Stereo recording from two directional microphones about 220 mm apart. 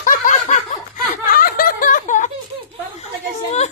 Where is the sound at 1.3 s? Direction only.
40° left (ahead or behind).